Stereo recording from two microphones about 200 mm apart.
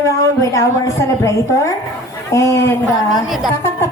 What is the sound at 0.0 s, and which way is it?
A woman's voice, 15° left (ahead or behind).